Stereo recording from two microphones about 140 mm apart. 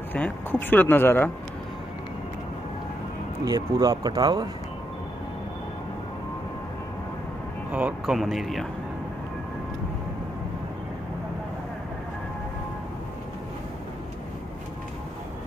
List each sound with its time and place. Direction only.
0.1 s speech: 15° left (ahead or behind)
3.4 s speech: 25° right (ahead or behind)
7.7 s speech: 5° right (ahead or behind)